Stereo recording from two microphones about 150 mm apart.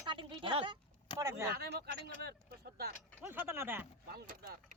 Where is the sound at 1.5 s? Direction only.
90° right.